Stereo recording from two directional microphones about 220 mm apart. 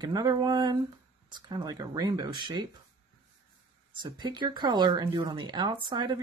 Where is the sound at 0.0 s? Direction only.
15° right (ahead or behind).